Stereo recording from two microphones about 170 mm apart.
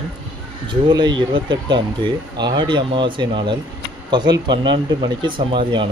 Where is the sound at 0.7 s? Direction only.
25° right (ahead or behind).